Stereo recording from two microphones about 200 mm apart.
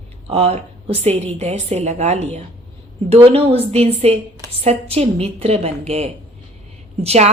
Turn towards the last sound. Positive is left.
turn(degrees=-30)  # may be behind; listen again after turning